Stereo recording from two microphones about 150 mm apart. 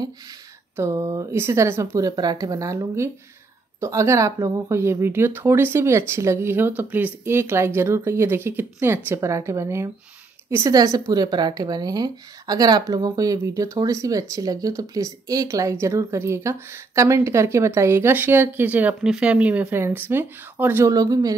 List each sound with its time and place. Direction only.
0.7 s speech: 20° right (ahead or behind)